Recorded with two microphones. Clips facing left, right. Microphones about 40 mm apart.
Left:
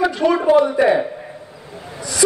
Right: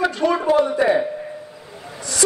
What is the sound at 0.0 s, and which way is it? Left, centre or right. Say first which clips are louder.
Speech: left 3 dB; centre.